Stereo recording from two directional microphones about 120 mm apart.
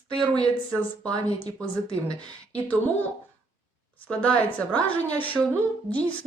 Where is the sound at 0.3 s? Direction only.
30° right (ahead or behind).